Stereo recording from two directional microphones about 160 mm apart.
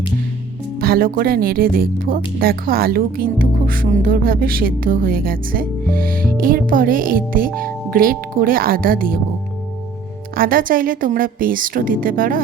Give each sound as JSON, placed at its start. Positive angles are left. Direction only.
{"t": 0.8, "sound": "speech", "side_deg": -65}
{"t": 10.3, "sound": "speech", "side_deg": -65}